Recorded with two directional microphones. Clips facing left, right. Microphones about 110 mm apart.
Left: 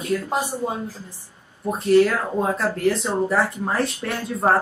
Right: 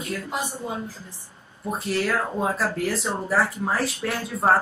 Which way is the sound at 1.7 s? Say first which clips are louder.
Left 8 dB; centre (ahead or behind).